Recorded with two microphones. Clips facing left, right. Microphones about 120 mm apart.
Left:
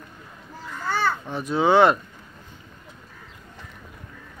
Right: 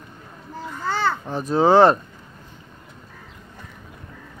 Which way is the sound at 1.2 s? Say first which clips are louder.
Right 3 dB; 35° right (ahead or behind).